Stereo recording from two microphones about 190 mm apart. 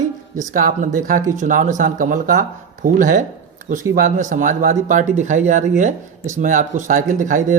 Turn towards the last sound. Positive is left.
turn(degrees=-40)  # may be behind; listen again after turning